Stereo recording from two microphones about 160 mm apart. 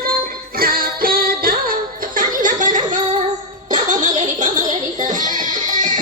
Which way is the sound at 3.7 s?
50° right (ahead or behind).